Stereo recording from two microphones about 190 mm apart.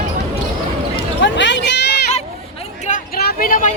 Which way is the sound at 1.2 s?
70° left (ahead or behind).